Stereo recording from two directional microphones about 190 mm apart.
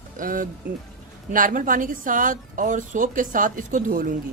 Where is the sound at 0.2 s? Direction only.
45° right (ahead or behind).